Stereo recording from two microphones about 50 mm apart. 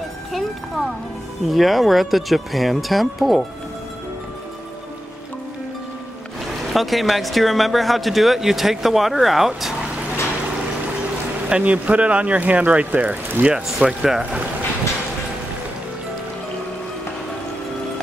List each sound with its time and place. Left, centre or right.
0.3 s a sound: centre
1.5 s speech: centre
6.7 s speech: centre
11.4 s speech: right
13.7 s speech: centre